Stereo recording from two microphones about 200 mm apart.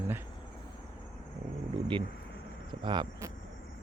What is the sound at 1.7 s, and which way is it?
Speech, 25° right (ahead or behind).